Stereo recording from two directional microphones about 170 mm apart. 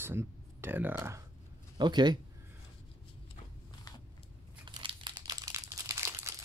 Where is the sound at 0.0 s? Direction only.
15° right (ahead or behind).